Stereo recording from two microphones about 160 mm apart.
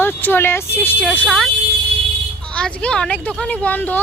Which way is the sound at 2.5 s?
5° left (ahead or behind).